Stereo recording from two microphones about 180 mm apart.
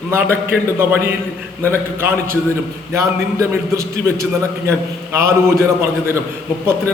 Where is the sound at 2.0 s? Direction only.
15° right (ahead or behind).